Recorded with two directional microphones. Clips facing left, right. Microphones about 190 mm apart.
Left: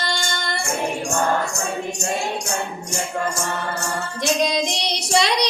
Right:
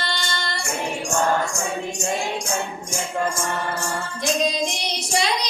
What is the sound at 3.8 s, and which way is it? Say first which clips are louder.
Child singing: left 1 dB; 70° left (ahead or behind).